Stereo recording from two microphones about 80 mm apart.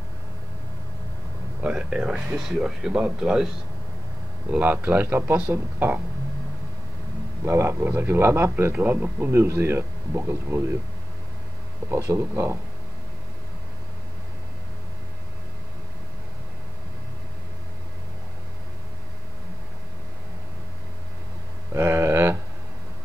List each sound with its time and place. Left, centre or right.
1.6 s speech: centre
4.5 s speech: right
7.4 s a man's voice: right
11.9 s a man's voice: right
21.7 s a sound: right